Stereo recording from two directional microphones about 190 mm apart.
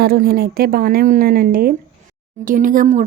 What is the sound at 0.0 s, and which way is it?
Speech, 55° right (ahead or behind).